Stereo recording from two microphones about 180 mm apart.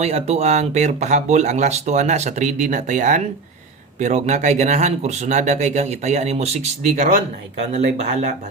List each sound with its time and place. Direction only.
0.0 s speech: 35° right (ahead or behind)